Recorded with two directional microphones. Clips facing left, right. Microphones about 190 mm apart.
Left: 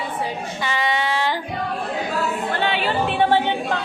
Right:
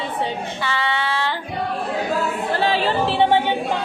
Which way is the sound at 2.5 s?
35° right (ahead or behind).